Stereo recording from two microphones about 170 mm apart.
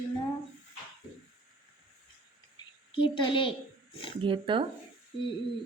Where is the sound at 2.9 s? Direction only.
30° left (ahead or behind).